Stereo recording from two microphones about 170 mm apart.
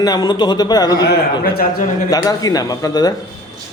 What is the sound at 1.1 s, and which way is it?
Speech, 70° left (ahead or behind).